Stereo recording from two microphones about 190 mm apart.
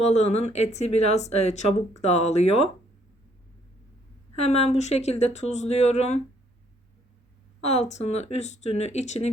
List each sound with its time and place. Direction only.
0.0 s speech: 35° left (ahead or behind)
4.4 s speech: 35° left (ahead or behind)
7.6 s speech: 35° left (ahead or behind)